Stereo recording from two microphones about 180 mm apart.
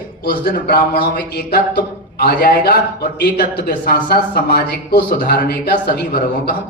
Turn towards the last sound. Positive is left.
turn(degrees=55)  # may be behind; listen again after turning